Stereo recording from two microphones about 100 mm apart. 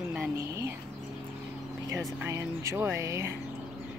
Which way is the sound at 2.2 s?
30° right (ahead or behind).